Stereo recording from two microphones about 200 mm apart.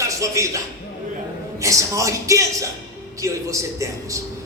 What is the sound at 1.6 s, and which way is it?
Speech, 15° right (ahead or behind).